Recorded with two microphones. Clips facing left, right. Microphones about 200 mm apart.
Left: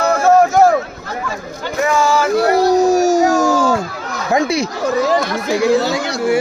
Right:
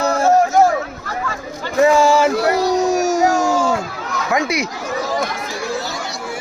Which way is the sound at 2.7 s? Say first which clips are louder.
Left 4 dB; 35° left (ahead or behind).